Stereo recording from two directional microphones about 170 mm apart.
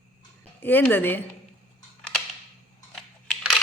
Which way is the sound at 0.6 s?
10° left (ahead or behind).